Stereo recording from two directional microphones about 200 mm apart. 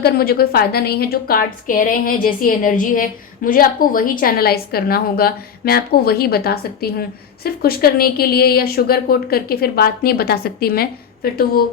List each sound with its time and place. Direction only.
0.0 s a woman's voice: 50° left (ahead or behind)